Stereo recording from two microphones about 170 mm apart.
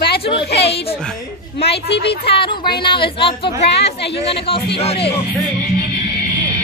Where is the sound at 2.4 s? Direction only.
30° left (ahead or behind).